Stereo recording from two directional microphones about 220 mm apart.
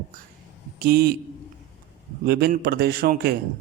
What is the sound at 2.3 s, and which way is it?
Speech, 45° right (ahead or behind).